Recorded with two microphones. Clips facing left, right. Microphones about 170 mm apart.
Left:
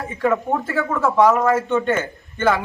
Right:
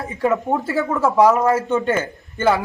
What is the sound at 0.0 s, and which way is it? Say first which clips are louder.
Speech: even; 20° right (ahead or behind).